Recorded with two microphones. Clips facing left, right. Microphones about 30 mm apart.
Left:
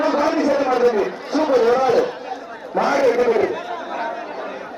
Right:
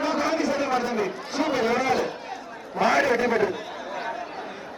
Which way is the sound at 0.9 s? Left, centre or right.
Left.